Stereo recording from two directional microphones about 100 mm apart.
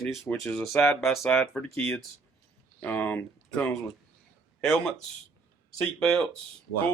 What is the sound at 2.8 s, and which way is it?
Speech, 15° left (ahead or behind).